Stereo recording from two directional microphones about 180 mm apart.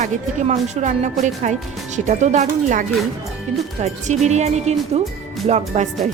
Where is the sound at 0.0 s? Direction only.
40° right (ahead or behind).